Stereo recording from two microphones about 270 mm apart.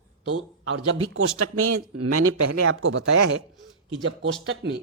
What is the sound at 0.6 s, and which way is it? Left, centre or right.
Speech, right.